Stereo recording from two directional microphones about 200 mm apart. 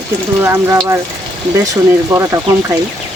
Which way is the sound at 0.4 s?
15° right (ahead or behind).